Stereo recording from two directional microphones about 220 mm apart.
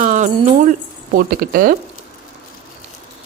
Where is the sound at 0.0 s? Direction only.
35° right (ahead or behind).